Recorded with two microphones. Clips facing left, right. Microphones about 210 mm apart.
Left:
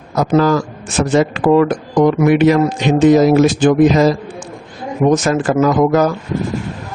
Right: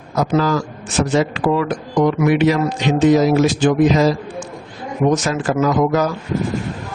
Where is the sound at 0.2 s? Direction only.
50° left (ahead or behind).